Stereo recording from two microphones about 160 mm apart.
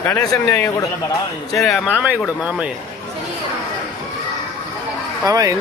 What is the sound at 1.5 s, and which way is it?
Speech, centre (ahead or behind).